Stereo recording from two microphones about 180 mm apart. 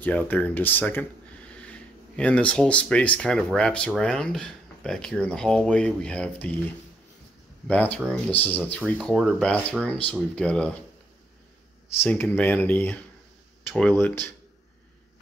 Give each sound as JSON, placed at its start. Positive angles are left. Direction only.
{"t": 0.0, "sound": "speech", "side_deg": 10}
{"t": 7.6, "sound": "speech", "side_deg": 10}
{"t": 12.0, "sound": "speech", "side_deg": 10}